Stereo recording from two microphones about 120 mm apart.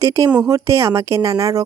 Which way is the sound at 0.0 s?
30° right (ahead or behind).